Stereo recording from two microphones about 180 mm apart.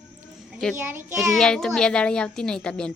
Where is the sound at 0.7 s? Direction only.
10° right (ahead or behind).